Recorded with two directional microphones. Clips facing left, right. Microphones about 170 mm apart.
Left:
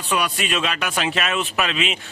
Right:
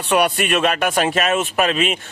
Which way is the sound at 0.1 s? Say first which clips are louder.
Right 6 dB; 60° right (ahead or behind).